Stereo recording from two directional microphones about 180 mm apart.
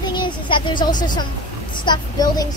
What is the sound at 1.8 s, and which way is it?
Speech, 20° left (ahead or behind).